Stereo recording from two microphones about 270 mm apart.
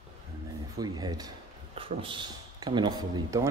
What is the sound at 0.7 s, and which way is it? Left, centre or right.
Speech, centre.